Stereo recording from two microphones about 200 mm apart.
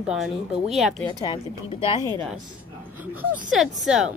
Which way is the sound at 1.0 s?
20° left (ahead or behind).